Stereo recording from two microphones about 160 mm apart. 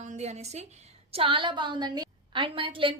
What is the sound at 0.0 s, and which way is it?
A woman's voice, 45° right (ahead or behind).